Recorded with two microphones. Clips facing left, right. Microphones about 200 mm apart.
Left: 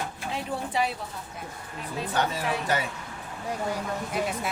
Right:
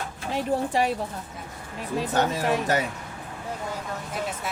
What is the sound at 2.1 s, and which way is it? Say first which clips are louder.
Speech: right 4 dB; 45° right (ahead or behind).